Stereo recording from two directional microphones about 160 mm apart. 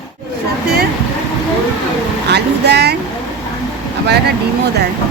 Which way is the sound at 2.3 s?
90° right.